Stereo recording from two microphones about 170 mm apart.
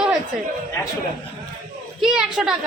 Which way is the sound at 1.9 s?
5° right (ahead or behind).